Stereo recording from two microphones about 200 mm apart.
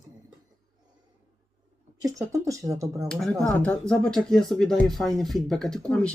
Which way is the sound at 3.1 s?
5° left (ahead or behind).